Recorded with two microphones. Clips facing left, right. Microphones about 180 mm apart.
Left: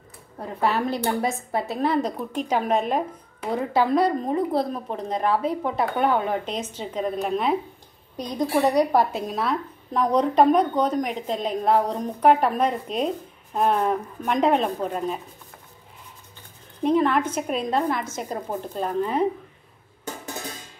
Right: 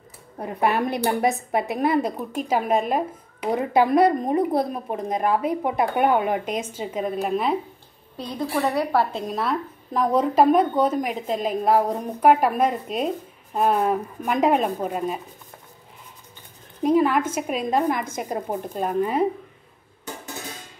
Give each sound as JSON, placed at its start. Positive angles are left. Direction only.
{"t": 0.4, "sound": "a woman's voice", "side_deg": -15}
{"t": 3.4, "sound": "a woman's voice", "side_deg": -15}
{"t": 8.2, "sound": "a woman's voice", "side_deg": 15}
{"t": 9.1, "sound": "a woman's voice", "side_deg": 0}
{"t": 16.9, "sound": "a woman's voice", "side_deg": -10}